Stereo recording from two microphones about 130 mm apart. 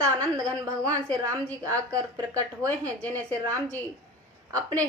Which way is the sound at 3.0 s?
10° left (ahead or behind).